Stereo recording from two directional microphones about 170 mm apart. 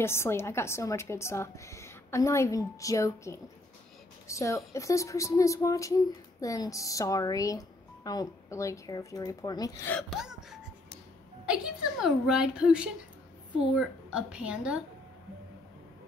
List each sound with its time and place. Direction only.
0.0 s a woman's voice: 15° left (ahead or behind)
9.8 s a woman's voice: 5° left (ahead or behind)